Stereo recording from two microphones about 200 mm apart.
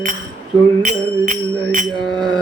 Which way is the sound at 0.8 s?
40° right (ahead or behind).